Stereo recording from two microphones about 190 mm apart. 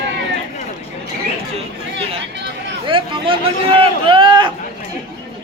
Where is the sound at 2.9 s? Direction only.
25° right (ahead or behind).